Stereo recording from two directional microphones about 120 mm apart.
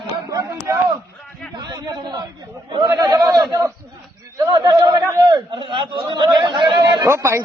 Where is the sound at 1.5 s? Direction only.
35° right (ahead or behind).